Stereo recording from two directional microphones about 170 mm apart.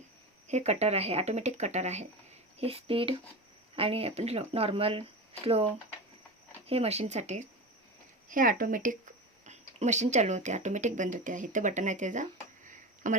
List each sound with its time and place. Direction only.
0.4 s speech: 40° right (ahead or behind)
8.3 s speech: 55° right (ahead or behind)
12.7 s a sound: 50° right (ahead or behind)